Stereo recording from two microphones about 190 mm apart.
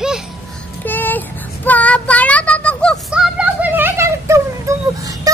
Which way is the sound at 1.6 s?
5° left (ahead or behind).